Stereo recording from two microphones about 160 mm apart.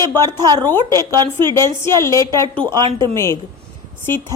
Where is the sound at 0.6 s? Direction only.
15° left (ahead or behind).